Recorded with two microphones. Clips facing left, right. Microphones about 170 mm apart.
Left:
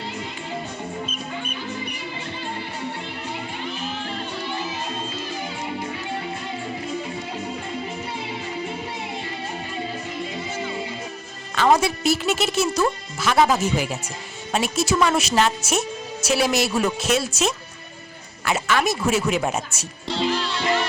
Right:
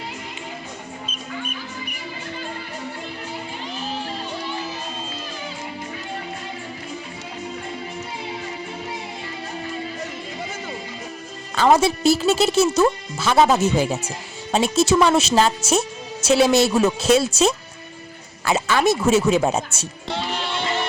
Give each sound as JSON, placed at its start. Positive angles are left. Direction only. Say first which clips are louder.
{"t": 11.8, "sound": "speech", "louder": "right 4 dB", "side_deg": -30}
{"t": 20.1, "sound": "music", "louder": "left 4 dB", "side_deg": -60}
{"t": 20.4, "sound": "music", "louder": "right 1 dB", "side_deg": -20}